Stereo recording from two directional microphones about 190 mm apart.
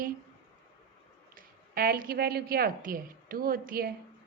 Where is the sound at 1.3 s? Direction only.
50° right (ahead or behind).